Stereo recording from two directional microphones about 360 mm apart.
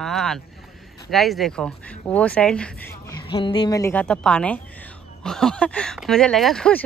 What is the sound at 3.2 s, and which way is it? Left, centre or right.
Speech, centre.